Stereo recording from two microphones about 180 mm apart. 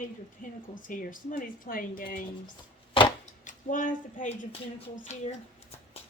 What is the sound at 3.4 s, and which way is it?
Speech, 45° left (ahead or behind).